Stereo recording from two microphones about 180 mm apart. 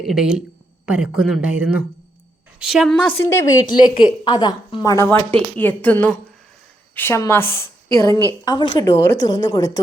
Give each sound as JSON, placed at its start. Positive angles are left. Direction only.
{"t": 0.0, "sound": "speech", "side_deg": -5}
{"t": 3.8, "sound": "a woman's voice", "side_deg": 25}
{"t": 5.0, "sound": "a woman's voice", "side_deg": 10}